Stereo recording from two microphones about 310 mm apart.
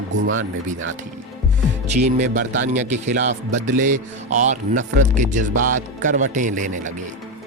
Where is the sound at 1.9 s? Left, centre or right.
Right.